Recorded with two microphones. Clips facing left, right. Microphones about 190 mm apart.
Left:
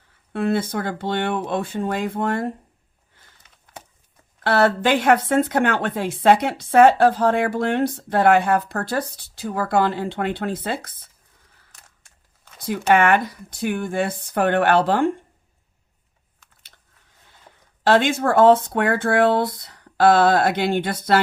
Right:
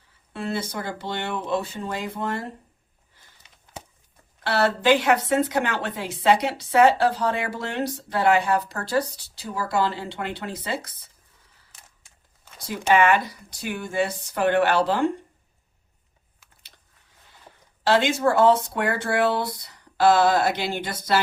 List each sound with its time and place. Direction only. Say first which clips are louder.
0.3 s speech: left 7 dB; 55° left (ahead or behind)
4.4 s speech: left 2 dB; 55° left (ahead or behind)
12.6 s speech: left 2 dB; 55° left (ahead or behind)
17.8 s speech: left 2 dB; 55° left (ahead or behind)